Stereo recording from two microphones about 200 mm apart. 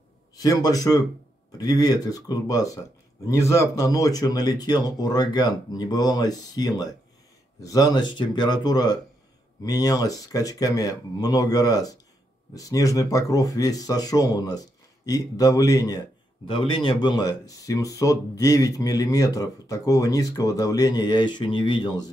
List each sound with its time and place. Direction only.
0.4 s speech: 20° left (ahead or behind)